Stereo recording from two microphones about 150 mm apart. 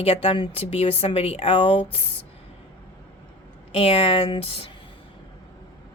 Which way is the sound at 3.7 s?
40° left (ahead or behind).